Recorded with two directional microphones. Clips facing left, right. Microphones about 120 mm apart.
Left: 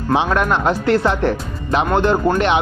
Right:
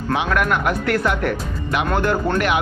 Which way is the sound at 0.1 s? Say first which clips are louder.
Left 3 dB; 25° left (ahead or behind).